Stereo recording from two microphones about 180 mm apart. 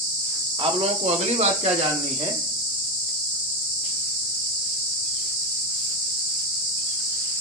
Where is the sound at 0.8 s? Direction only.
35° right (ahead or behind).